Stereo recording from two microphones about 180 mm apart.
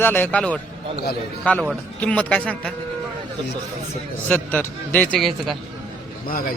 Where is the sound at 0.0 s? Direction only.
10° left (ahead or behind).